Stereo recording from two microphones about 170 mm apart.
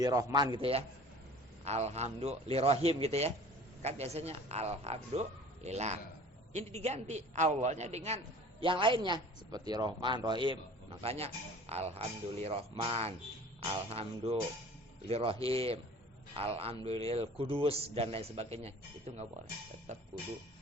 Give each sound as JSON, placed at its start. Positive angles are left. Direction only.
{"t": 0.0, "sound": "a man's voice", "side_deg": -20}